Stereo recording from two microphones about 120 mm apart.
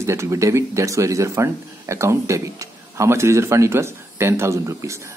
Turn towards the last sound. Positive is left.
turn(degrees=-25)  # may be behind; listen again after turning